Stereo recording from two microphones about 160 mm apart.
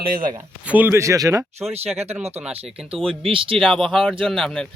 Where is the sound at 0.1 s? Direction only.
65° right (ahead or behind).